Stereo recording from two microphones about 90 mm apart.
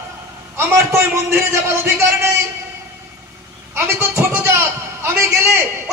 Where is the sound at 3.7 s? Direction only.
30° right (ahead or behind).